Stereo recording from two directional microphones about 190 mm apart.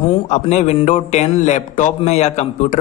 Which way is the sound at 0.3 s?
35° left (ahead or behind).